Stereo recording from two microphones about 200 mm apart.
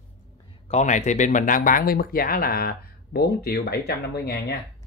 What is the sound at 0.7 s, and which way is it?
Speech, 35° left (ahead or behind).